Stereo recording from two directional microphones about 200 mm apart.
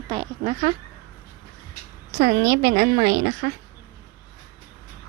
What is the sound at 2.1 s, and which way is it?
Speech, 55° right (ahead or behind).